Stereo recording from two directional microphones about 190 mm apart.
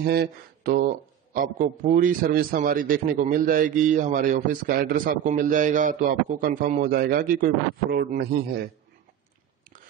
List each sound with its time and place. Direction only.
0.0 s a man's voice: 55° right (ahead or behind)